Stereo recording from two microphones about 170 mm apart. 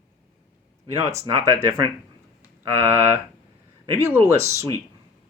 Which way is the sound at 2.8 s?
15° right (ahead or behind).